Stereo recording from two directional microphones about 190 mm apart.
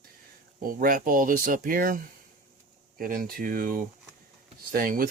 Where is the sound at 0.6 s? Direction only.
45° right (ahead or behind).